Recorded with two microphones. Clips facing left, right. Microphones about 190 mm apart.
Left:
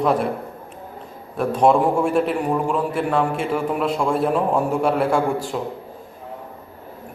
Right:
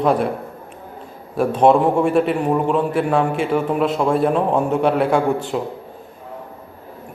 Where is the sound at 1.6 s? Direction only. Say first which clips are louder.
Right 2 dB; 5° right (ahead or behind).